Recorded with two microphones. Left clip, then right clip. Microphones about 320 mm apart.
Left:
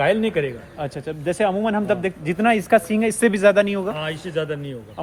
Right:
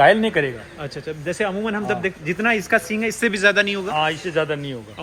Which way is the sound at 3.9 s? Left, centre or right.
Centre.